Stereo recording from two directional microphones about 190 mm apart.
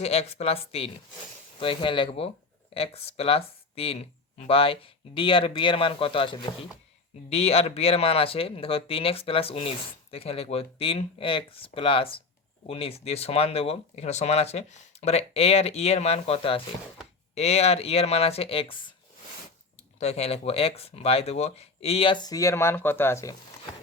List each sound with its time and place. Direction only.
0.0 s speech: 35° left (ahead or behind)
20.0 s speech: 35° left (ahead or behind); by 23.4 s 15° left (ahead or behind)